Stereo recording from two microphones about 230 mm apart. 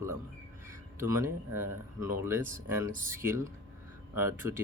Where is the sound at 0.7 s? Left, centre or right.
Centre.